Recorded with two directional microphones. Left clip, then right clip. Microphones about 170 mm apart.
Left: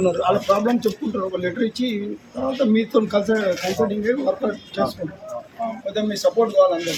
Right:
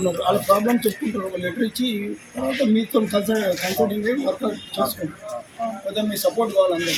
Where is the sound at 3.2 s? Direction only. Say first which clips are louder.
Left 1 dB; centre (ahead or behind).